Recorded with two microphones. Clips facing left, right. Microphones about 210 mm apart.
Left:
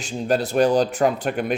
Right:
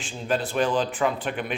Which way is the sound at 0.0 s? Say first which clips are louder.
Left 5 dB; 40° left (ahead or behind).